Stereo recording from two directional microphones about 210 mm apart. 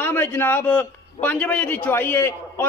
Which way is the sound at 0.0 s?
10° left (ahead or behind).